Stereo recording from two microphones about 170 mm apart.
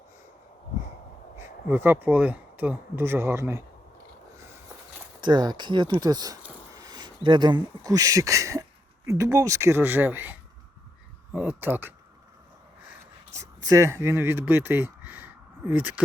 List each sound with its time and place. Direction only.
1.4 s speech: 15° right (ahead or behind)
4.4 s a sound: 15° right (ahead or behind)
5.2 s speech: 25° right (ahead or behind); by 10.3 s 10° right (ahead or behind)
11.3 s speech: 10° right (ahead or behind)
13.3 s speech: 20° right (ahead or behind)